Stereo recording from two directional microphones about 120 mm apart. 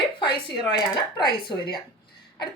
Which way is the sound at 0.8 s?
40° left (ahead or behind).